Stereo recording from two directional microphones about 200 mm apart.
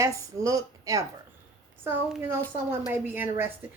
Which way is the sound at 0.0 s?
15° right (ahead or behind).